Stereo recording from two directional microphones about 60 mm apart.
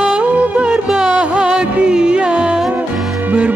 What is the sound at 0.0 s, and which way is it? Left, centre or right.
Music, centre.